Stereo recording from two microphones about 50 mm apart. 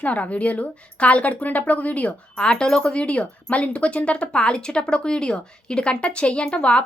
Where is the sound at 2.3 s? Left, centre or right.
Centre.